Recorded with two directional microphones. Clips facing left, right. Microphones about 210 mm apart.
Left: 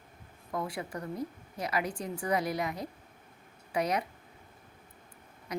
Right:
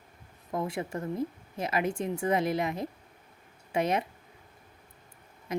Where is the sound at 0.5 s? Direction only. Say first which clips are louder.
Right 3 dB; 25° right (ahead or behind).